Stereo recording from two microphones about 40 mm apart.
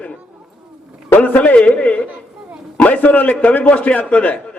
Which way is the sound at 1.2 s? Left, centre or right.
Left.